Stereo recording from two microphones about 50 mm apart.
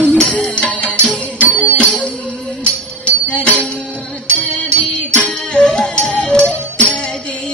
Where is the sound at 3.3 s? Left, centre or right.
Left.